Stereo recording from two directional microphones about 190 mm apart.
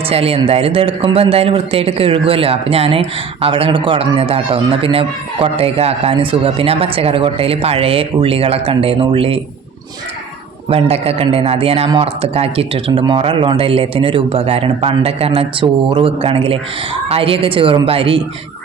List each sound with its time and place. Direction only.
0.1 s speech: 30° right (ahead or behind)
10.7 s speech: 30° right (ahead or behind)